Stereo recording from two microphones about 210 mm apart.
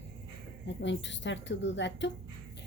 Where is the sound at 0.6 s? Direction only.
60° left (ahead or behind).